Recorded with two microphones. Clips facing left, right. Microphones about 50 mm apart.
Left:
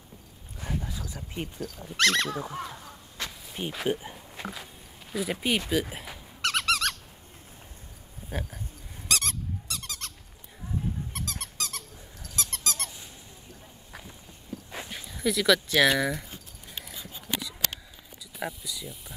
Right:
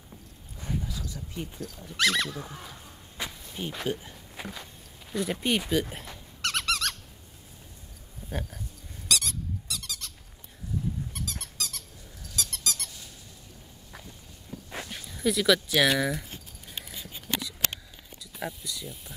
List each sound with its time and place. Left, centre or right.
0.6 s a sound: centre
0.8 s a sound: left
1.6 s speech: centre
2.2 s speech: left
3.2 s whip: centre
3.6 s speech: centre
4.4 s walk: centre
5.1 s squeak: centre
8.3 s speech: centre
9.0 s squeak: left
11.1 s squeak: left
14.8 s speech: centre
18.4 s speech: centre